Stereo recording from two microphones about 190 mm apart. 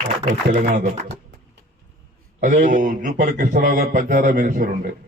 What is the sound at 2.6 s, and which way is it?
Speech, 45° right (ahead or behind).